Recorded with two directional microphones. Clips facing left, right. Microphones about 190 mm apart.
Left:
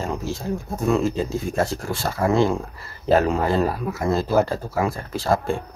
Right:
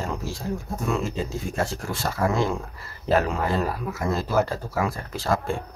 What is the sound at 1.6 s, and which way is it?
Speech, 30° left (ahead or behind).